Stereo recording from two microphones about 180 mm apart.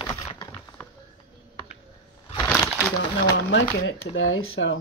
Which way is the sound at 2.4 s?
10° left (ahead or behind).